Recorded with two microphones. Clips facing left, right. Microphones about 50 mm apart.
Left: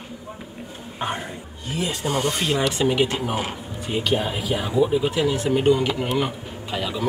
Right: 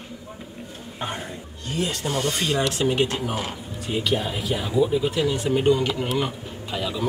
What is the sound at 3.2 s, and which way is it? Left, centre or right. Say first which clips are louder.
Speech: left 2 dB; left.